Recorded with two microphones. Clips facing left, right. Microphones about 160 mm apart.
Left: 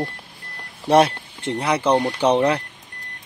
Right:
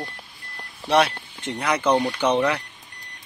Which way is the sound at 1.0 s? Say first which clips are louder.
Left 4 dB; 30° left (ahead or behind).